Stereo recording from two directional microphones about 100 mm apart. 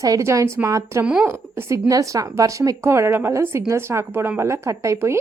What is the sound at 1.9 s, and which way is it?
A woman's voice, 35° right (ahead or behind).